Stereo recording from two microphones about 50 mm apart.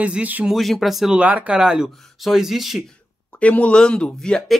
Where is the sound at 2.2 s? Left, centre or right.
Centre.